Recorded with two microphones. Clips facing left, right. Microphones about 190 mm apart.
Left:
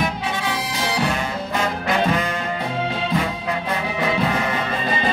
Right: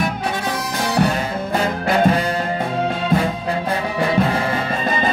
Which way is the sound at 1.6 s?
35° right (ahead or behind).